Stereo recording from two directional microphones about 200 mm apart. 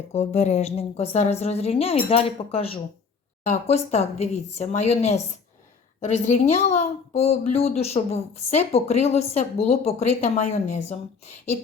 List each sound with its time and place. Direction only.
0.1 s a woman's voice: 35° left (ahead or behind)